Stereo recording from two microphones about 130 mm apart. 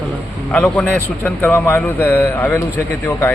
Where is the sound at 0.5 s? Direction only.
10° left (ahead or behind).